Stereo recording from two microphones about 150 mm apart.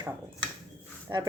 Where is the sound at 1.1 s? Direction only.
20° right (ahead or behind).